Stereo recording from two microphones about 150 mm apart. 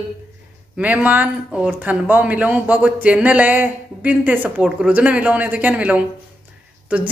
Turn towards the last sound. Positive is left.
turn(degrees=-10)  # may be behind; listen again after turning